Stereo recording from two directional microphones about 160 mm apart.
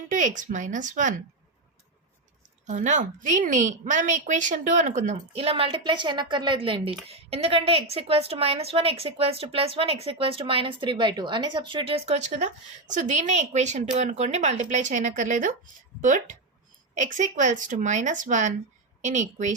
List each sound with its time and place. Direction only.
0.1 s a woman's voice: 55° right (ahead or behind)
2.6 s a woman's voice: 50° right (ahead or behind)